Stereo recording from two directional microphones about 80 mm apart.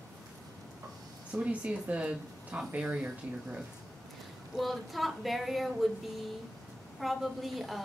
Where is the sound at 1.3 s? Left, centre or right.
Centre.